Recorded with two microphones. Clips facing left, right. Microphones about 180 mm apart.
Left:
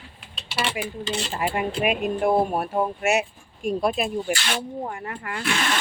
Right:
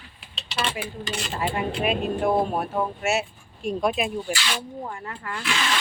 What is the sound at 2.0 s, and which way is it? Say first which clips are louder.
Speech: left 2 dB; 10° left (ahead or behind).